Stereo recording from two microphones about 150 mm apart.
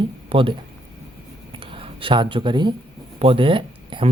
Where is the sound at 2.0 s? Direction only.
35° right (ahead or behind).